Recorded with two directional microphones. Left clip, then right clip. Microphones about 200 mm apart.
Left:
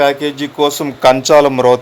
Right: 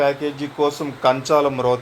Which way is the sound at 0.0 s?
60° left (ahead or behind).